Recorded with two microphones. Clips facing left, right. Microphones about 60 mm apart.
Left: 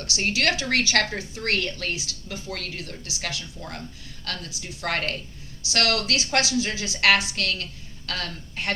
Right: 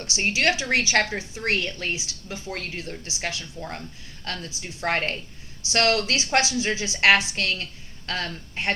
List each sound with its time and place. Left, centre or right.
0.0 s a woman's voice: right